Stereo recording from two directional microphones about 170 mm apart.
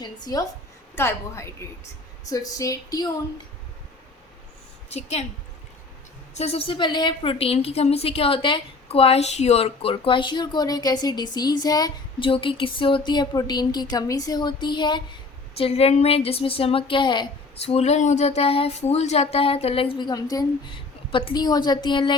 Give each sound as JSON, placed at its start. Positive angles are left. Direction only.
{"t": 0.0, "sound": "a woman's voice", "side_deg": 20}
{"t": 4.9, "sound": "a woman's voice", "side_deg": 40}
{"t": 6.3, "sound": "a woman's voice", "side_deg": 40}